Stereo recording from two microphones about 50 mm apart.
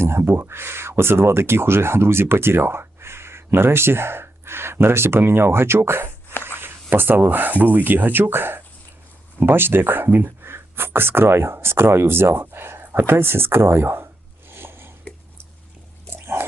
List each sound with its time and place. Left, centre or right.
0.0 s speech: right
14.5 s a sound: right
16.1 s pig: right